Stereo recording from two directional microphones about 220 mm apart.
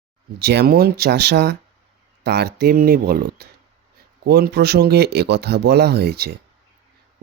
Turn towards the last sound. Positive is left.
turn(degrees=-45)  # may be behind; listen again after turning